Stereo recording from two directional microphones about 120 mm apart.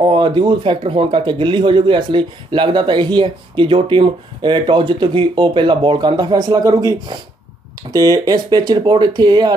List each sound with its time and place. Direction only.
0.0 s speech: 45° right (ahead or behind)